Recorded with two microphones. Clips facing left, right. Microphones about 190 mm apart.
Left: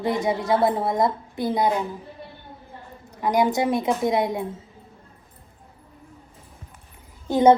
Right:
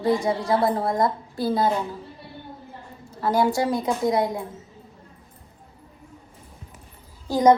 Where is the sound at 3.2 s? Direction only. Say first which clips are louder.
Even; 15° left (ahead or behind).